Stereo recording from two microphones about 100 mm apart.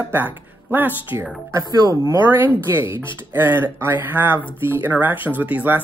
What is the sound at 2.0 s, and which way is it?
Speech, 30° right (ahead or behind).